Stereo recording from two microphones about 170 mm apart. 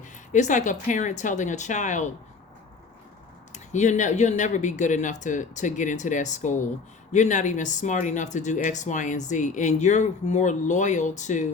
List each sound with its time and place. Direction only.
0.3 s speech: 45° left (ahead or behind)
3.5 s speech: 45° left (ahead or behind)